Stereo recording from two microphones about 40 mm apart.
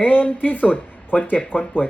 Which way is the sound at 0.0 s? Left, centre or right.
Left.